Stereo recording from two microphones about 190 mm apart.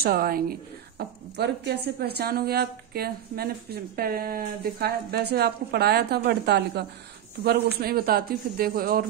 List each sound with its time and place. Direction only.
0.0 s a man's voice: 55° right (ahead or behind)